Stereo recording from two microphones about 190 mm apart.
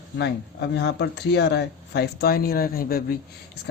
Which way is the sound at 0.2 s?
65° left (ahead or behind).